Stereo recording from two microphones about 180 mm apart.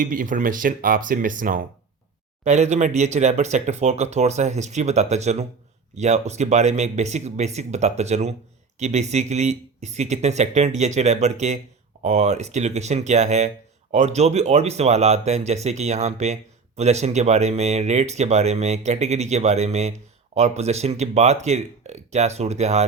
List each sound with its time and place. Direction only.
0.0 s speech: 50° right (ahead or behind)